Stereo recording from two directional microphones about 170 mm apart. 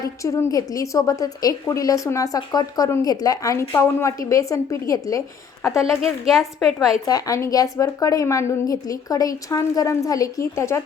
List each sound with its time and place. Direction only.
0.2 s a woman's voice: 20° left (ahead or behind)
5.7 s a woman's voice: centre (ahead or behind)
7.1 s a woman's voice: 20° left (ahead or behind)